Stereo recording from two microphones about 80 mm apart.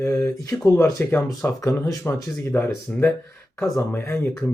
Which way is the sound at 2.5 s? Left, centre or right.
Left.